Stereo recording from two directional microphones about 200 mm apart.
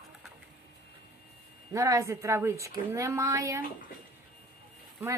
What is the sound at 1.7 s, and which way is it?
Speech, 15° right (ahead or behind).